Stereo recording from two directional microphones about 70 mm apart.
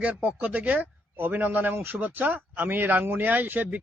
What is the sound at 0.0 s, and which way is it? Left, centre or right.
Speech, right.